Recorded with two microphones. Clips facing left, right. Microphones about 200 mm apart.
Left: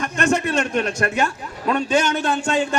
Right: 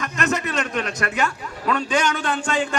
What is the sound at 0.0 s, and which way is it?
A man's voice, 30° left (ahead or behind).